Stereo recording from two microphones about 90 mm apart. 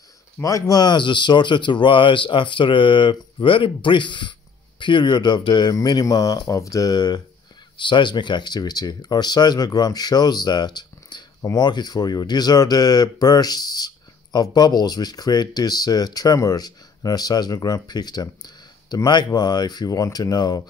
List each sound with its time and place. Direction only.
0.4 s speech: 40° left (ahead or behind)
7.7 s speech: 60° left (ahead or behind)